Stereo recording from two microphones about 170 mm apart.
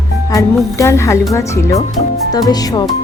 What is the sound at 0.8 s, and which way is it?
Speech, 15° left (ahead or behind).